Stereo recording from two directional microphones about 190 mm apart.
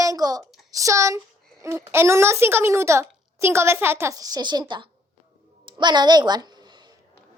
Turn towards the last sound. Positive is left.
turn(degrees=-20)  # may be behind; listen again after turning